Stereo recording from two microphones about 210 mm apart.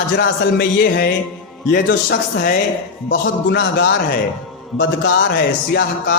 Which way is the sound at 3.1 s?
60° left (ahead or behind).